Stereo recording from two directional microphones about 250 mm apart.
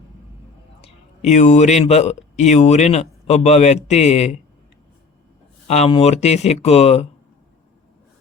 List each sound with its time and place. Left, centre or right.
0.8 s speech: left
5.6 s speech: left